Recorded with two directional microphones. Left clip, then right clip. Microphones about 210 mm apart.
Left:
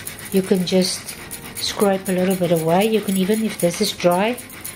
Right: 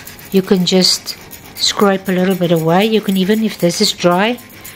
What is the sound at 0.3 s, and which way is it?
Speech, 35° right (ahead or behind).